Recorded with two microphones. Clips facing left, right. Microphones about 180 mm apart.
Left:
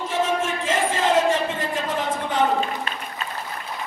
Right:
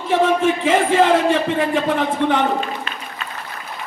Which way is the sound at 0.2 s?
60° right (ahead or behind).